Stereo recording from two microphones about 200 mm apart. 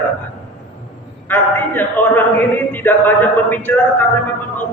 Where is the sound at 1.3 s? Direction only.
10° left (ahead or behind).